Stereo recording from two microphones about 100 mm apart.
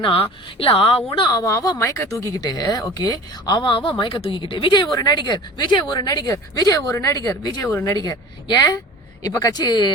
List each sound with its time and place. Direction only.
0.0 s speech: 65° left (ahead or behind)
1.3 s speech: 35° left (ahead or behind)
2.4 s speech: 45° left (ahead or behind)
7.7 s speech: 25° left (ahead or behind)
7.9 s speech: 45° left (ahead or behind)